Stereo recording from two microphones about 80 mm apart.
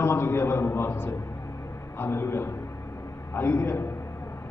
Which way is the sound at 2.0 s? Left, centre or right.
Left.